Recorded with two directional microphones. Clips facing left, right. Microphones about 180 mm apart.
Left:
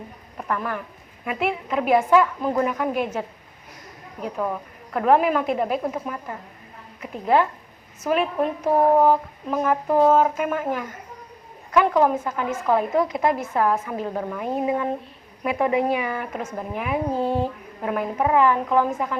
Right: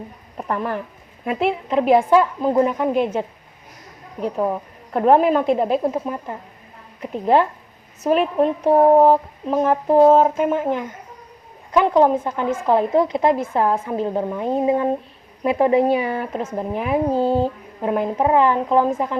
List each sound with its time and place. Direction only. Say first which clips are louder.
0.3 s a woman's voice: right 3 dB; 30° right (ahead or behind)